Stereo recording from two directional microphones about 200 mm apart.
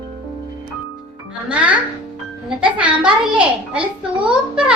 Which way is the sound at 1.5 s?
5° right (ahead or behind).